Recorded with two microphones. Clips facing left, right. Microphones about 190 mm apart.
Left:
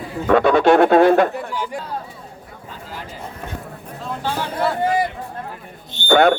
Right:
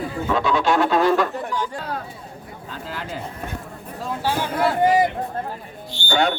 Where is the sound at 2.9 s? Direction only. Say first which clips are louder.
Right 4 dB; 90° right.